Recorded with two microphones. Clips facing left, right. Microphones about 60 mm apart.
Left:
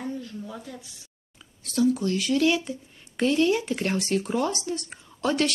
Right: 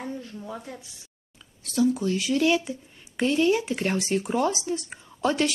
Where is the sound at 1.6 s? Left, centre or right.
Centre.